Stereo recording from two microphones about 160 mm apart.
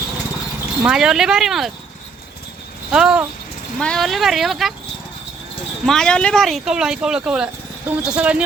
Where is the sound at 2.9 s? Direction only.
5° right (ahead or behind).